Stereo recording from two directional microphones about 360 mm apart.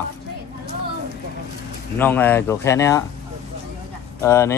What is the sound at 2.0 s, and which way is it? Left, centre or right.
Speech, centre.